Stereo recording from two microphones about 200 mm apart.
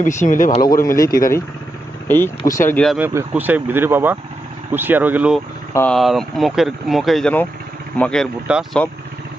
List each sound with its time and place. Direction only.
0.3 s speech: 40° left (ahead or behind)
0.9 s speech: 15° left (ahead or behind)
3.0 s speech: 10° right (ahead or behind)
5.7 s speech: 5° left (ahead or behind)